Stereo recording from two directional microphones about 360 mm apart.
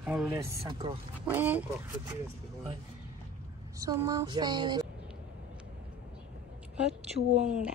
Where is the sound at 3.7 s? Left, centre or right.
Centre.